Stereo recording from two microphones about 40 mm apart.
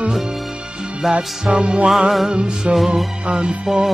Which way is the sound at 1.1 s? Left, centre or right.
Right.